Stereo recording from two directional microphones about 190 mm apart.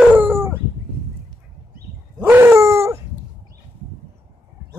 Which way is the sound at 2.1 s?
10° right (ahead or behind).